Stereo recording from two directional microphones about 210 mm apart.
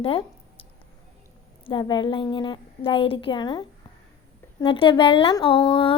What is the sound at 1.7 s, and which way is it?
Speech, 20° left (ahead or behind).